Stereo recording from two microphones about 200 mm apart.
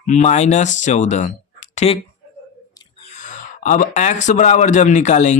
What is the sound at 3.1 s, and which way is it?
Speech, 40° left (ahead or behind).